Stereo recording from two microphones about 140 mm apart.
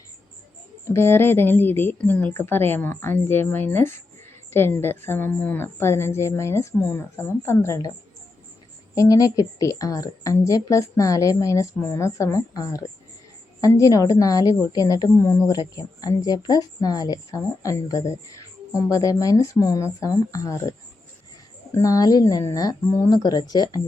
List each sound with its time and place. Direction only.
0.9 s a woman's voice: 15° left (ahead or behind)
9.0 s a woman's voice: 25° left (ahead or behind)